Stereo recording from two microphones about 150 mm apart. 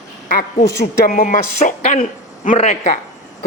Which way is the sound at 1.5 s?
55° left (ahead or behind).